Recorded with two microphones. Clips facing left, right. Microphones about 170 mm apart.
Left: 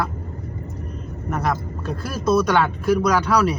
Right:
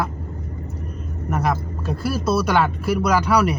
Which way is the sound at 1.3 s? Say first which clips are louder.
Right 1 dB; 10° right (ahead or behind).